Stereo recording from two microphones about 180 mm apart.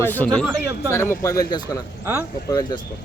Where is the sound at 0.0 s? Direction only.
10° left (ahead or behind).